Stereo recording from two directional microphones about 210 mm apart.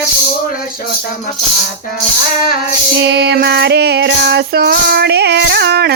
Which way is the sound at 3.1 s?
50° right (ahead or behind).